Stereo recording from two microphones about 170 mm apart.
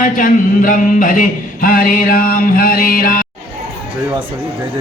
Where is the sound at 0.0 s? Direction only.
50° left (ahead or behind).